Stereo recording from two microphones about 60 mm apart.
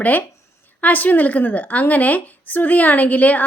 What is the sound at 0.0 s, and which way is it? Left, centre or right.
A woman's voice, left.